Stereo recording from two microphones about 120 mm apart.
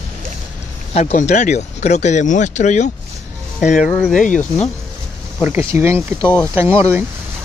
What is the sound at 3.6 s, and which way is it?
Speech, 90° left.